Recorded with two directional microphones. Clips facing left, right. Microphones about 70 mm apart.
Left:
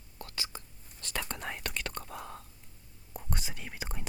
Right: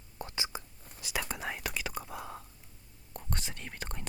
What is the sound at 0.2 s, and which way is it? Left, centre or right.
Whispering, right.